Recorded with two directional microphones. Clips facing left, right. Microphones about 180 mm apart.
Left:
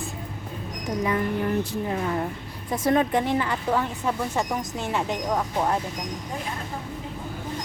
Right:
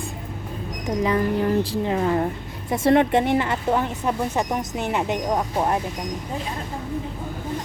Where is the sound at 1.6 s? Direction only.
35° right (ahead or behind); by 5.7 s 20° right (ahead or behind).